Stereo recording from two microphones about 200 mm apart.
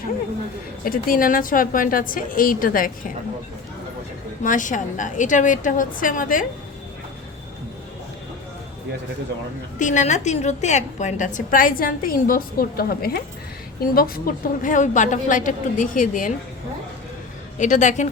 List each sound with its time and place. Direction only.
0.9 s a woman's voice: 45° left (ahead or behind)
4.4 s a woman's voice: 40° left (ahead or behind)
9.7 s a woman's voice: 40° left (ahead or behind)
17.6 s a woman's voice: 35° left (ahead or behind)